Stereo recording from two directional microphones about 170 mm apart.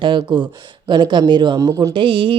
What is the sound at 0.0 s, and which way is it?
Speech, 25° right (ahead or behind).